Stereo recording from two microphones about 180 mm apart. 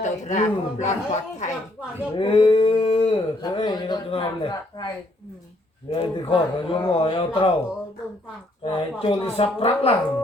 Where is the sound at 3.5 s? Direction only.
25° left (ahead or behind).